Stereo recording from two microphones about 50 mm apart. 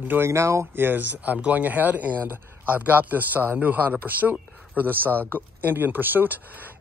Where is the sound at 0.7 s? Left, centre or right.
Right.